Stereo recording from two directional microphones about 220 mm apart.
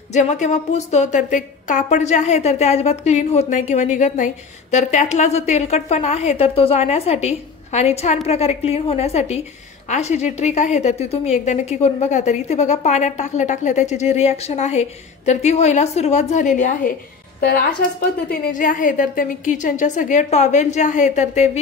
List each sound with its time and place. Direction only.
0.1 s a woman's voice: 30° left (ahead or behind)
18.3 s a woman's voice: 40° left (ahead or behind)